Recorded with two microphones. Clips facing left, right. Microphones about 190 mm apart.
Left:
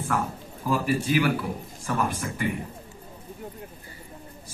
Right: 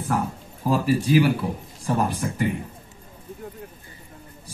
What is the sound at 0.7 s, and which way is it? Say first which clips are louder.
Speech: right 4 dB; 35° right (ahead or behind).